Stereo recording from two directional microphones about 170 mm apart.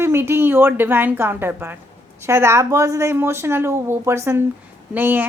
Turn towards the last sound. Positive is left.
turn(degrees=-10)  # may be behind; listen again after turning